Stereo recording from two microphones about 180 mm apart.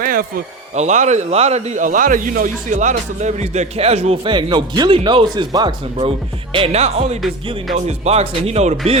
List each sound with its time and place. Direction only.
0.0 s speech: 50° right (ahead or behind)